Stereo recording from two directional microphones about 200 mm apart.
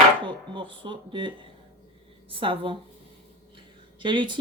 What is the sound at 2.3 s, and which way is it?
Speech, 25° right (ahead or behind).